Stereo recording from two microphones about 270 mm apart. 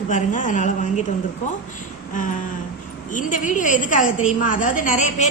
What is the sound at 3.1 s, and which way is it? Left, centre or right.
A woman's voice, left.